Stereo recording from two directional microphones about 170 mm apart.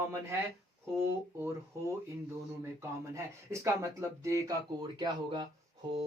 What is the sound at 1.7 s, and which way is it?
Speech, 15° right (ahead or behind).